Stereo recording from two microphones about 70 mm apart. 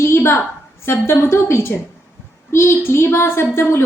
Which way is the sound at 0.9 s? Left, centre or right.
Left.